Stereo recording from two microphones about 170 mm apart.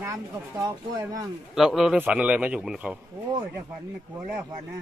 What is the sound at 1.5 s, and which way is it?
A man's voice, centre (ahead or behind).